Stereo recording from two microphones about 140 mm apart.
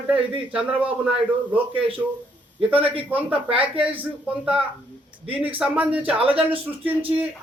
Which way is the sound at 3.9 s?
10° right (ahead or behind).